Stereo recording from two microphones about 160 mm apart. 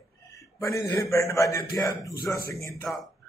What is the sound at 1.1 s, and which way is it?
Speech, 20° left (ahead or behind).